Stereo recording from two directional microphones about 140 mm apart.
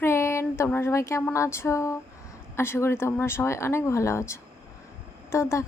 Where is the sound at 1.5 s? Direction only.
20° left (ahead or behind).